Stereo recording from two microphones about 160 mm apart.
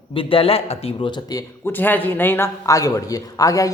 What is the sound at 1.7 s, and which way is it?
A man's voice, 10° left (ahead or behind).